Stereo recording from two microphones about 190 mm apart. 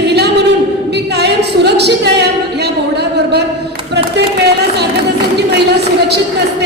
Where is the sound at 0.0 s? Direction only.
60° right (ahead or behind).